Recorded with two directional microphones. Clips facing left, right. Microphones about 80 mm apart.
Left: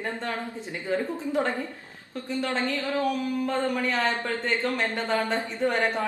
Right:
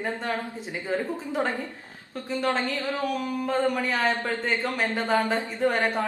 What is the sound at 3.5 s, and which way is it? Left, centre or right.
Speech, centre.